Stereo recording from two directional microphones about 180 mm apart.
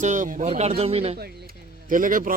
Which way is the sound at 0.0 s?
45° right (ahead or behind).